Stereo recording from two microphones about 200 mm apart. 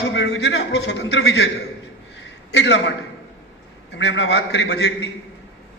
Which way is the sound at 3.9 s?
60° left (ahead or behind).